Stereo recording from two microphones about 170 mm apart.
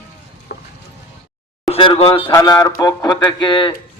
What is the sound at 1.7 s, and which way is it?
Speech, 35° left (ahead or behind).